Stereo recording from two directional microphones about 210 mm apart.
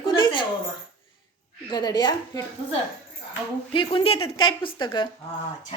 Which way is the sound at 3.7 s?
25° left (ahead or behind).